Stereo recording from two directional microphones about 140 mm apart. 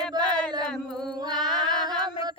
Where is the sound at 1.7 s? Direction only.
30° right (ahead or behind).